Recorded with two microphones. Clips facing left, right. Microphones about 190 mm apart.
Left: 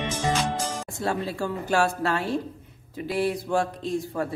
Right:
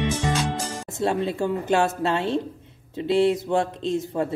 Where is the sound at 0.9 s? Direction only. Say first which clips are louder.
Right 8 dB; 20° right (ahead or behind).